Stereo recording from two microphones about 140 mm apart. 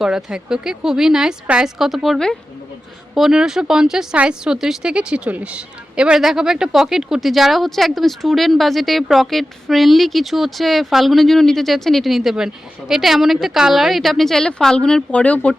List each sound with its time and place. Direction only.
0.0 s speech: 5° right (ahead or behind)